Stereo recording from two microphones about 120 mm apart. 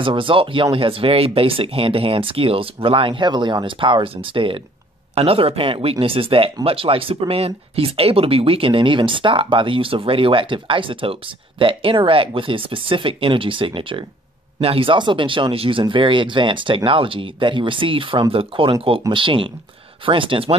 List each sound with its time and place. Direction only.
0.0 s speech: 45° right (ahead or behind)